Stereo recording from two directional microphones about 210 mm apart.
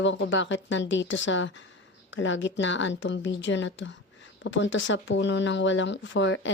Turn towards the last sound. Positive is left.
turn(degrees=60)  # may be behind; listen again after turning